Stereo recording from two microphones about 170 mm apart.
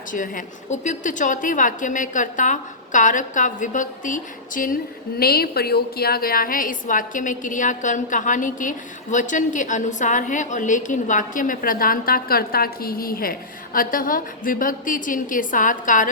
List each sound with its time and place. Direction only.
0.1 s a woman's voice: 50° left (ahead or behind)